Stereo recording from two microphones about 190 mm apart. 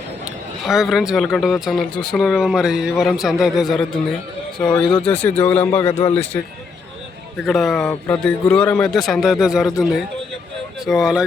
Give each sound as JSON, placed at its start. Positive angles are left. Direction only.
{"t": 0.6, "sound": "speech", "side_deg": 0}
{"t": 4.9, "sound": "speech", "side_deg": 25}
{"t": 5.4, "sound": "speech", "side_deg": 10}
{"t": 7.4, "sound": "speech", "side_deg": 0}
{"t": 10.8, "sound": "speech", "side_deg": 0}